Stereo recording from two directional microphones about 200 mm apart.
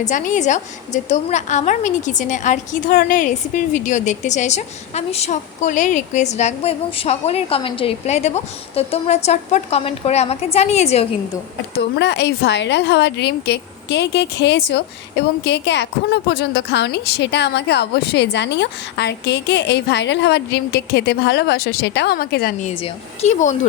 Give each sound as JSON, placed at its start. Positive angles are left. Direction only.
{"t": 0.0, "sound": "a woman's voice", "side_deg": 40}
{"t": 11.7, "sound": "a woman's voice", "side_deg": 55}
{"t": 22.6, "sound": "a woman's voice", "side_deg": 35}